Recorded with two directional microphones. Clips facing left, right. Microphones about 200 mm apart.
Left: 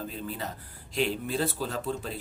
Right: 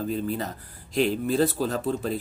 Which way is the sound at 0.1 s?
45° right (ahead or behind).